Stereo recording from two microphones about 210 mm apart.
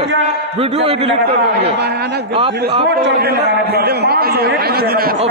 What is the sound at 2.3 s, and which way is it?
Speech, 25° right (ahead or behind).